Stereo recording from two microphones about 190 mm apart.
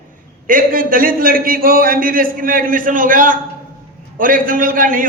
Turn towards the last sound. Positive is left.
turn(degrees=-45)  # may be behind; listen again after turning